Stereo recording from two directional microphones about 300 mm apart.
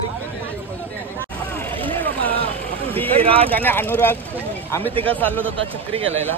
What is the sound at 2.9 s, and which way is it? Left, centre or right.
Speech, centre.